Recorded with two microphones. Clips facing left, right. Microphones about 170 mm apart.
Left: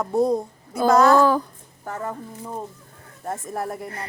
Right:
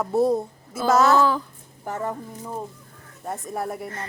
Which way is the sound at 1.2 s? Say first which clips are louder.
Left 3 dB; 45° left (ahead or behind).